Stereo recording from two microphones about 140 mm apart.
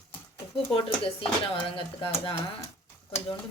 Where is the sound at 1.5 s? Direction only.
40° left (ahead or behind).